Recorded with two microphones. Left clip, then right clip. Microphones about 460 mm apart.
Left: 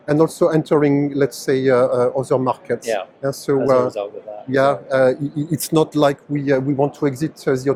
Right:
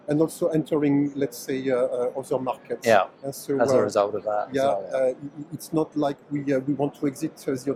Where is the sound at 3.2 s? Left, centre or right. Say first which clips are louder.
Left 6 dB; left.